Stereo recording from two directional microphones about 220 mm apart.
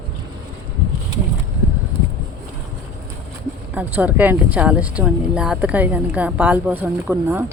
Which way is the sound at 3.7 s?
5° right (ahead or behind).